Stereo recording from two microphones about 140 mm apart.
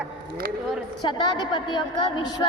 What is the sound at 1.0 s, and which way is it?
A child's voice, 30° left (ahead or behind).